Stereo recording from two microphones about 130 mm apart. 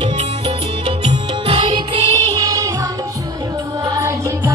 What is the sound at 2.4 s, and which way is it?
Music, 25° right (ahead or behind).